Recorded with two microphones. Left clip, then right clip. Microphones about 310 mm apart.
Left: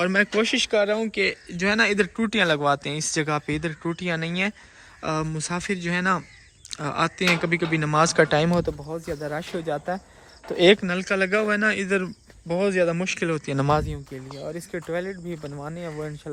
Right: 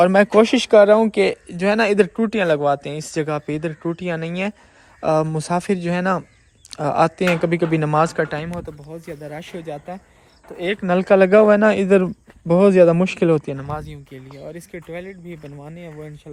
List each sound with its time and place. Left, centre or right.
0.0 s speech: centre
8.4 s speech: left
8.9 s speech: centre
10.5 s speech: left
10.8 s speech: centre
13.8 s speech: centre